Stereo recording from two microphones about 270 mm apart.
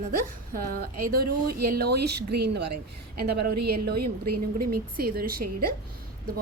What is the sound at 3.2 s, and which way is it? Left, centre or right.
Speech, right.